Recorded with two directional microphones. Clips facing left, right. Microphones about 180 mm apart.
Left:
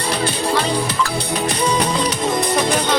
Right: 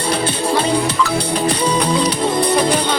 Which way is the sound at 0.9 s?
30° right (ahead or behind).